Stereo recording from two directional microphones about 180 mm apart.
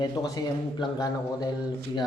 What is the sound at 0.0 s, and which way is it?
Speech, 20° left (ahead or behind).